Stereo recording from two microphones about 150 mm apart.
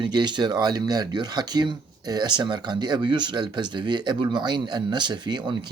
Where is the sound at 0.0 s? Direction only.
30° right (ahead or behind).